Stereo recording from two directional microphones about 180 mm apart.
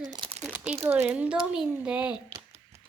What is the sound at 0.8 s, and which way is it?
Speech, 10° right (ahead or behind).